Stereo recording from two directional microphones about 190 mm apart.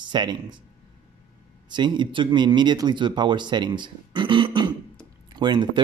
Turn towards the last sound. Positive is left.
turn(degrees=-25)  # may be behind; listen again after turning